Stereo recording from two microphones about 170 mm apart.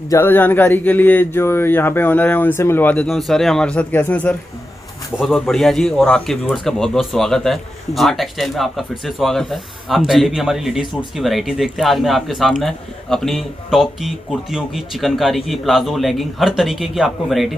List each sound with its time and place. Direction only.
0.1 s a man's voice: 10° left (ahead or behind)
5.5 s a man's voice: centre (ahead or behind)